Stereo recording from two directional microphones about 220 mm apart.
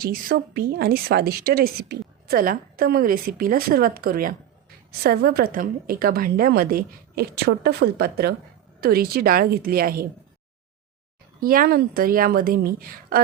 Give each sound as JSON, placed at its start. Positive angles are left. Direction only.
{"t": 0.0, "sound": "a woman's voice", "side_deg": -40}
{"t": 11.3, "sound": "a woman's voice", "side_deg": -40}